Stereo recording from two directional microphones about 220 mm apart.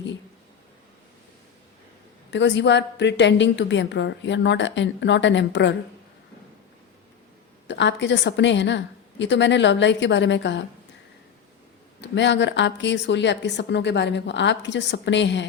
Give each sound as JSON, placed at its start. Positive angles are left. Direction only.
{"t": 2.3, "sound": "a woman's voice", "side_deg": 55}
{"t": 7.7, "sound": "a woman's voice", "side_deg": 55}
{"t": 11.9, "sound": "a woman's voice", "side_deg": 55}